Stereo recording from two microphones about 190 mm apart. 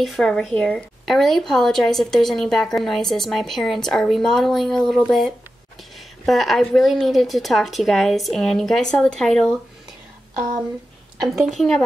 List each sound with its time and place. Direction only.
0.0 s a woman's voice: centre (ahead or behind)
11.2 s a woman's voice: centre (ahead or behind)